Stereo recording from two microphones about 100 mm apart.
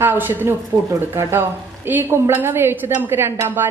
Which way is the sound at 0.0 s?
20° right (ahead or behind).